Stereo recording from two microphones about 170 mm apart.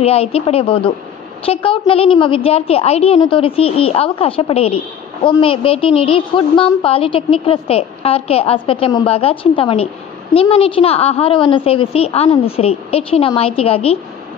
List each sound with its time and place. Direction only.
0.0 s a woman's voice: 35° left (ahead or behind)